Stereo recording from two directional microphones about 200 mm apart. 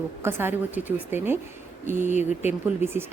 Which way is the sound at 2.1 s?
35° left (ahead or behind).